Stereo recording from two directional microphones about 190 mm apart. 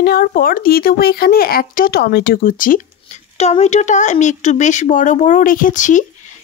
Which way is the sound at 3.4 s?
35° left (ahead or behind).